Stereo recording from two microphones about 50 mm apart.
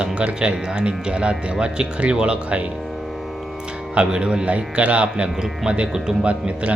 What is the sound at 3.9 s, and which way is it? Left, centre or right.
Speech, centre.